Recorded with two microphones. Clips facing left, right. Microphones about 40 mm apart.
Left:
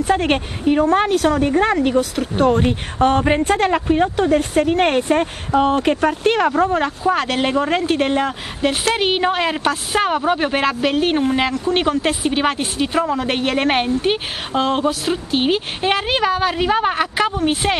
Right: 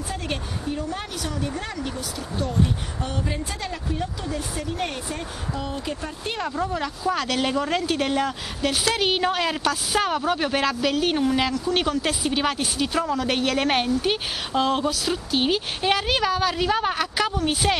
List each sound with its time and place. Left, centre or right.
0.0 s a woman's voice: left